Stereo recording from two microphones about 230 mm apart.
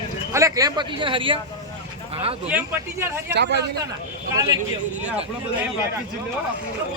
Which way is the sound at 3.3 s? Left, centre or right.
Right.